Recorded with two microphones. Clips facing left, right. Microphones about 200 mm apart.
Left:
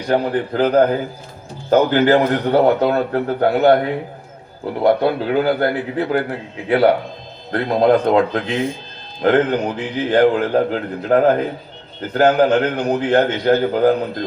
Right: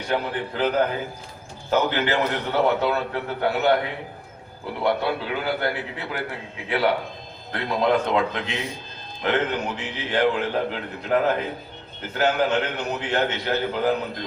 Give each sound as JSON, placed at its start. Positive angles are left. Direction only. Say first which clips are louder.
{"t": 0.1, "sound": "a man's voice", "louder": "left 8 dB", "side_deg": 45}
{"t": 4.8, "sound": "a man's voice", "louder": "left 8 dB", "side_deg": 40}